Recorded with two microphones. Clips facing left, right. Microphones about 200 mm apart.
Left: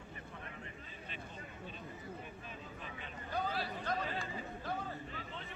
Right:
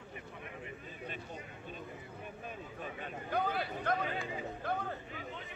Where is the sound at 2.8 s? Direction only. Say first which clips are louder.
Right 6 dB; 50° right (ahead or behind).